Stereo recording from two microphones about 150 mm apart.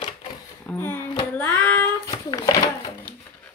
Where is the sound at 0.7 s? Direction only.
15° left (ahead or behind).